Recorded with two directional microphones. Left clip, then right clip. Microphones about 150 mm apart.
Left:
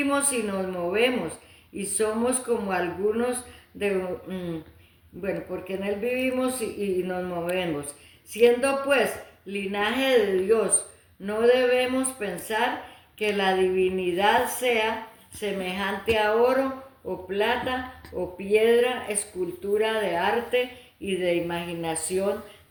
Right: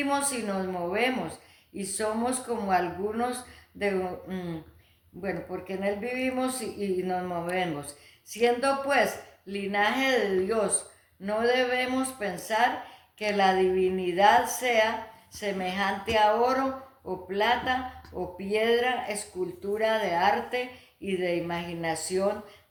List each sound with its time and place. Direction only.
0.1 s a man's voice: 30° right (ahead or behind)